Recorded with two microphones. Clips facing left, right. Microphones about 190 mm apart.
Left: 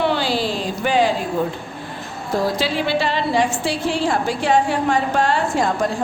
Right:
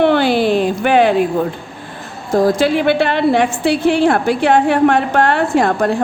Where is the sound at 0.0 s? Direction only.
60° right (ahead or behind).